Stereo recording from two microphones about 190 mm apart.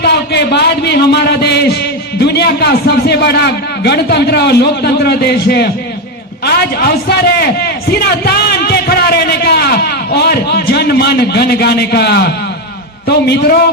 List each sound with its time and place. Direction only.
0.0 s a man's voice: 60° left (ahead or behind)